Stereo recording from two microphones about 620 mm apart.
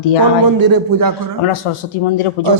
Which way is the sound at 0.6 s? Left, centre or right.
Right.